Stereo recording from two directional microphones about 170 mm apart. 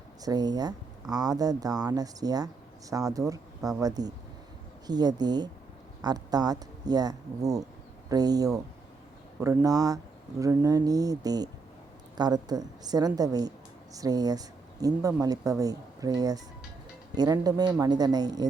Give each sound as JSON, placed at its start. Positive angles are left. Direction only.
{"t": 0.2, "sound": "speech", "side_deg": -25}